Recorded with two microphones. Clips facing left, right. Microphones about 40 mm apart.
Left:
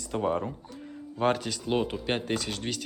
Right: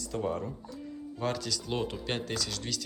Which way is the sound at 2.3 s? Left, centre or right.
Left.